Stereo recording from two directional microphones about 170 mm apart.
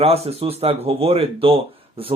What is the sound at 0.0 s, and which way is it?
Speech, 35° right (ahead or behind).